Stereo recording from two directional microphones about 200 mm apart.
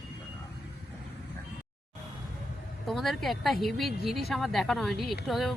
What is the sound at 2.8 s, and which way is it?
Speech, centre (ahead or behind).